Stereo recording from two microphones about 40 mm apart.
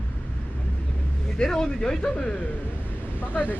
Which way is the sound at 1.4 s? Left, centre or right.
Centre.